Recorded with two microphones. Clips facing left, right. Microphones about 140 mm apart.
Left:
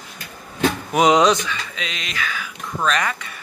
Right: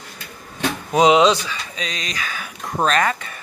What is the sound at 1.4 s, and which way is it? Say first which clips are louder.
Speech: left 1 dB; 40° right (ahead or behind).